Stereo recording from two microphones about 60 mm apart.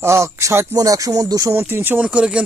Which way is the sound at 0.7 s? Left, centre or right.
Right.